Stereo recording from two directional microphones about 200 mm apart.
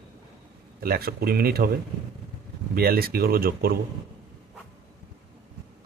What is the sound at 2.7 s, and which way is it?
Speech, 50° right (ahead or behind).